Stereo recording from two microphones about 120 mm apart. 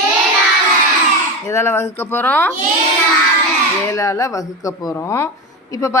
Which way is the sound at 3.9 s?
25° left (ahead or behind).